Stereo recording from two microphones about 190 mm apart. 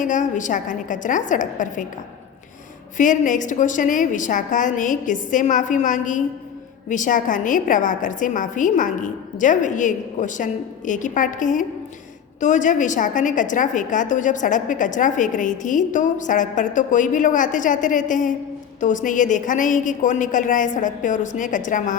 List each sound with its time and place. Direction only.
0.0 s a woman's voice: 40° left (ahead or behind)
3.0 s a woman's voice: 40° left (ahead or behind)